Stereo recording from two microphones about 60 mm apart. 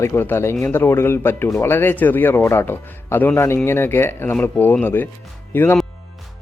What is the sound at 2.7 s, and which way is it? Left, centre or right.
Speech, left.